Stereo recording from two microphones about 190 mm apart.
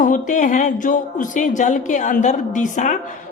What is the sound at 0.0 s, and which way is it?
A woman's voice, 40° left (ahead or behind).